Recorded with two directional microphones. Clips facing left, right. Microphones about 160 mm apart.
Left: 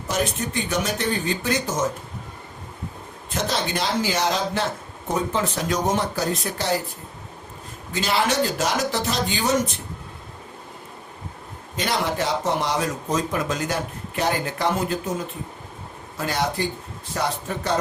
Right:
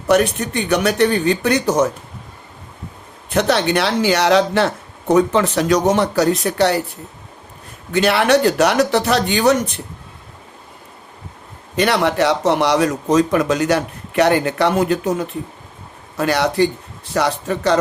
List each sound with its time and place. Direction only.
0.1 s speech: 65° right (ahead or behind)
3.2 s speech: 70° right (ahead or behind)
7.9 s speech: 65° right (ahead or behind)
11.8 s speech: 70° right (ahead or behind)
16.1 s a man's voice: 70° right (ahead or behind)